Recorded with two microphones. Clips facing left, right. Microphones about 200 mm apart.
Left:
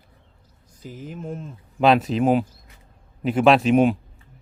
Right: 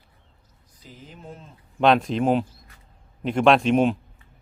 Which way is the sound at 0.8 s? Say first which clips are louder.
Left 9 dB; 50° left (ahead or behind).